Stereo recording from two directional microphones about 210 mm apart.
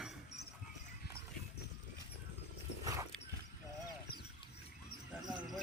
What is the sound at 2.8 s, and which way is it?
Dog, 15° right (ahead or behind).